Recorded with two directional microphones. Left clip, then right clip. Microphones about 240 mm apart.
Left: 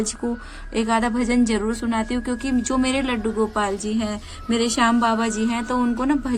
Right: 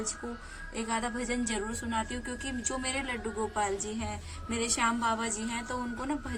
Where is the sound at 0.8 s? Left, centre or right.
Left.